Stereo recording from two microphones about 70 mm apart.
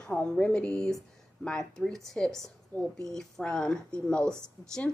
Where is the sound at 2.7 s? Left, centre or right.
Left.